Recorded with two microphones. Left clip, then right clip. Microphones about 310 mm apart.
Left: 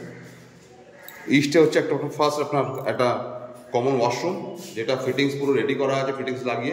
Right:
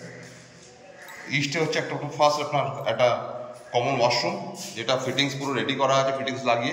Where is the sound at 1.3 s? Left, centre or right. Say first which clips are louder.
Left 7 dB; centre.